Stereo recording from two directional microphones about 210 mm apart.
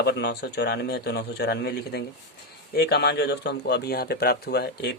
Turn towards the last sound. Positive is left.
turn(degrees=50)  # may be behind; listen again after turning